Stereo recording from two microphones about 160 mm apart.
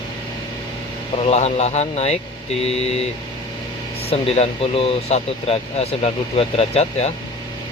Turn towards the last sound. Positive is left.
turn(degrees=40)  # may be behind; listen again after turning